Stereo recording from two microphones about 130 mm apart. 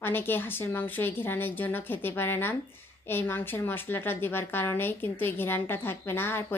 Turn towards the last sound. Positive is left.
turn(degrees=15)  # may be behind; listen again after turning